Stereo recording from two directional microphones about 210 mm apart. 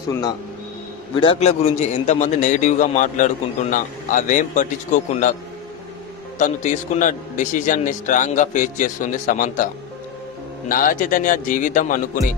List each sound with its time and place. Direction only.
1.2 s a man's voice: 30° left (ahead or behind)
6.3 s a man's voice: 35° left (ahead or behind)
10.7 s a man's voice: 40° left (ahead or behind)